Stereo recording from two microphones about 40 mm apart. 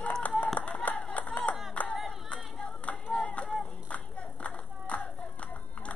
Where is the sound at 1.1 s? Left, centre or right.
Left.